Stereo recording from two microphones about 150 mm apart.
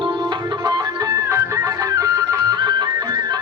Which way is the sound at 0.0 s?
30° right (ahead or behind).